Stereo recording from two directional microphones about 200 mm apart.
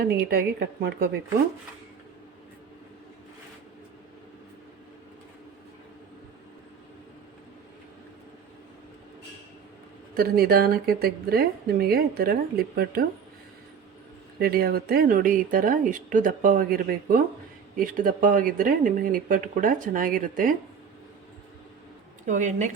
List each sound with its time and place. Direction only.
0.0 s speech: 50° right (ahead or behind)
10.2 s speech: 50° right (ahead or behind)
14.3 s speech: 50° right (ahead or behind)
22.3 s speech: 40° right (ahead or behind)